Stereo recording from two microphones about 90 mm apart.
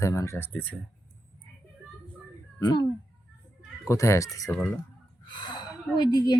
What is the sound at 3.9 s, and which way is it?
Speech, 35° left (ahead or behind).